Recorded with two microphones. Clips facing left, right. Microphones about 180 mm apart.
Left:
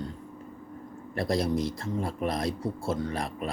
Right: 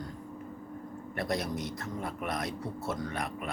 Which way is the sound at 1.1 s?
30° left (ahead or behind).